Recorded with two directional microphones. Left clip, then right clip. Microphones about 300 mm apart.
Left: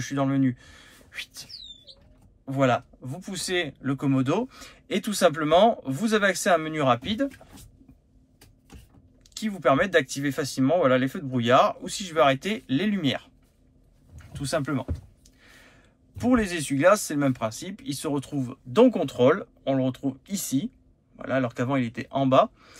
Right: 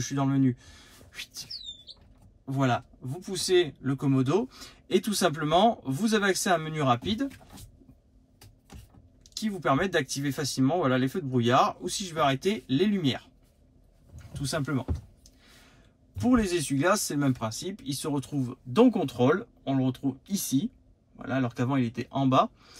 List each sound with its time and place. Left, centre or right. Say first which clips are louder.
0.0 s speech: left 2 dB; centre
9.3 s speech: left 4 dB; centre
14.3 s speech: left 4 dB; centre
16.2 s speech: left 1 dB; centre